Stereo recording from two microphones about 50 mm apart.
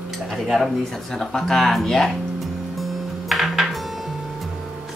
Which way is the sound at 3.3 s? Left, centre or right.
Centre.